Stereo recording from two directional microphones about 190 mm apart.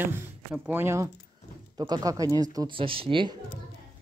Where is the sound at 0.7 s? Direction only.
10° right (ahead or behind).